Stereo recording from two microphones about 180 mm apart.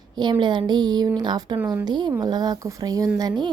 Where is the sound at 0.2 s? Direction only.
25° right (ahead or behind).